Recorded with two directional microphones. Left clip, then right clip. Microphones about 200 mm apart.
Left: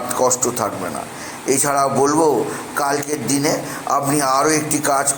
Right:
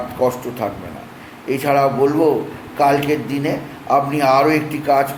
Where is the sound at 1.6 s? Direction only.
20° left (ahead or behind).